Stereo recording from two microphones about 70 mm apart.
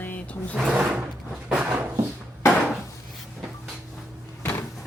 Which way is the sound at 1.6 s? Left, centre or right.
Right.